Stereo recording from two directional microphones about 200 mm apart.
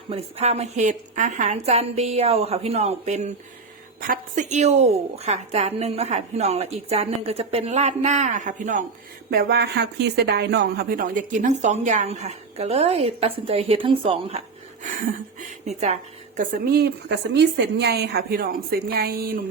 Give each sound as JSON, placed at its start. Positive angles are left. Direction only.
{"t": 0.1, "sound": "speech", "side_deg": -30}
{"t": 9.3, "sound": "speech", "side_deg": -50}
{"t": 16.4, "sound": "a woman's voice", "side_deg": -55}